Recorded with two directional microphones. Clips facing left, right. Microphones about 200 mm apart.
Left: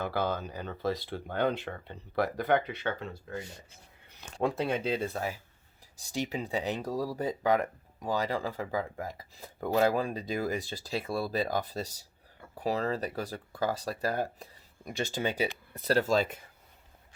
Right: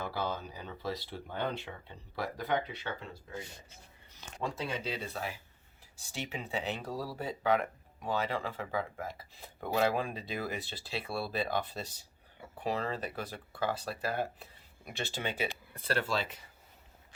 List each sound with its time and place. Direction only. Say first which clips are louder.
0.1 s speech: left 5 dB; 55° left (ahead or behind)
4.4 s speech: left 7 dB; 55° left (ahead or behind)